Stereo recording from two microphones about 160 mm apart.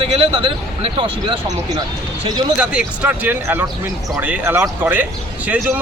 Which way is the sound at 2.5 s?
10° right (ahead or behind).